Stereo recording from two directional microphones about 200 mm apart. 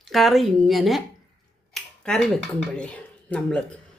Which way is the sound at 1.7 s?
5° left (ahead or behind).